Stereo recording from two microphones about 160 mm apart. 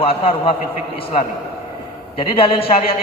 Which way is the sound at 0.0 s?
35° left (ahead or behind).